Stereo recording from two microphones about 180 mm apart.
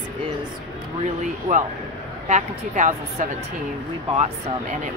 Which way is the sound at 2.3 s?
40° right (ahead or behind).